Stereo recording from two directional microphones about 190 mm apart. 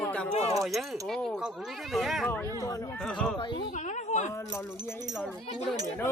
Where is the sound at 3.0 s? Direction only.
5° left (ahead or behind).